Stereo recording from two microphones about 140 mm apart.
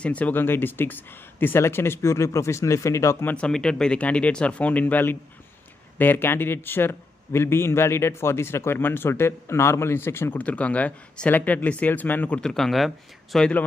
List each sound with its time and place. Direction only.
0.0 s a man's voice: 10° left (ahead or behind)
3.3 s a man's voice: 5° left (ahead or behind)